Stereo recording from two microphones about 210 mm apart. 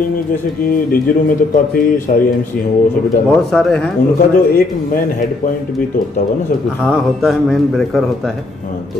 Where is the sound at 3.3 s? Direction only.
5° left (ahead or behind).